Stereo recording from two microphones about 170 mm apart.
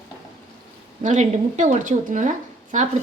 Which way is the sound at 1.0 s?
45° right (ahead or behind).